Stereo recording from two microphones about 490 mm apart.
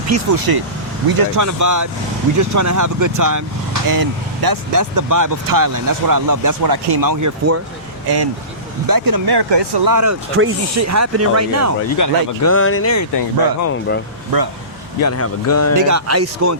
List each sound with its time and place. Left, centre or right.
0.1 s speech: right
8.9 s speech: right
9.8 s speech: right
11.9 s speech: left
15.0 s speech: left
15.7 s speech: right